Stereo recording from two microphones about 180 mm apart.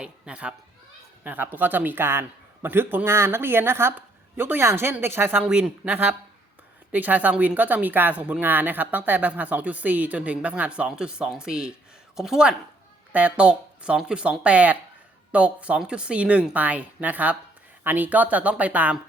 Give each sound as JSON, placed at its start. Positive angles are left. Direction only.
{"t": 0.0, "sound": "speech", "side_deg": -5}